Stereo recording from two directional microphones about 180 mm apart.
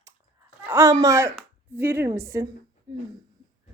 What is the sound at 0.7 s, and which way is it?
A woman's voice, 15° right (ahead or behind).